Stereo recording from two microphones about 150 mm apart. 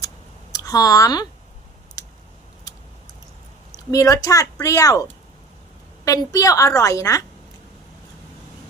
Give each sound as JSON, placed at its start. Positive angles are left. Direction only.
{"t": 0.0, "sound": "a sound", "side_deg": 25}
{"t": 3.9, "sound": "a woman's voice", "side_deg": 20}
{"t": 6.0, "sound": "a woman's voice", "side_deg": 25}